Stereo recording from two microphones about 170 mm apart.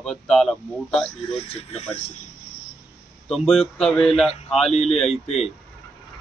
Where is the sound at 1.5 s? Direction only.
35° left (ahead or behind).